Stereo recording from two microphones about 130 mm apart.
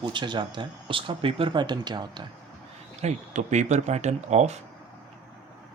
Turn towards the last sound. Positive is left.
turn(degrees=-60)  # may be behind; listen again after turning